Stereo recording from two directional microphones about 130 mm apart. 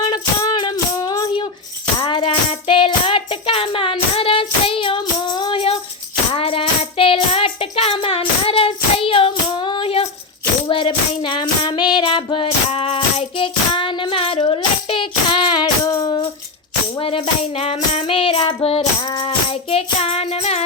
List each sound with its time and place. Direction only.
0.0 s music: 35° left (ahead or behind)
11.7 s child singing: 35° left (ahead or behind)
17.0 s music: 45° left (ahead or behind)
19.0 s music: 35° left (ahead or behind); by 20.7 s 55° left (ahead or behind)